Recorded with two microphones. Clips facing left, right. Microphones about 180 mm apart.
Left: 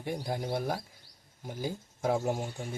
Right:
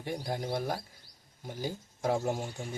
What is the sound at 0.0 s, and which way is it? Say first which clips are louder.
Speech: left 1 dB; 5° left (ahead or behind).